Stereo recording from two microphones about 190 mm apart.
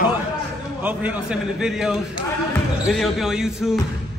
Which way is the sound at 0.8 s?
10° right (ahead or behind).